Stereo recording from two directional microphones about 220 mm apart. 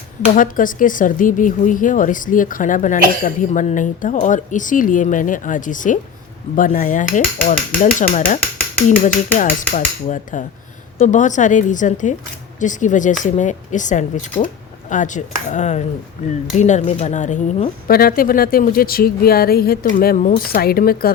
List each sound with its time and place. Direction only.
0.3 s speech: 40° left (ahead or behind)
9.4 s speech: 35° left (ahead or behind)